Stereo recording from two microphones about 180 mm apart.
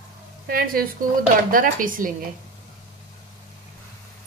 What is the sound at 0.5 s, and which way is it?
Frying, 55° right (ahead or behind).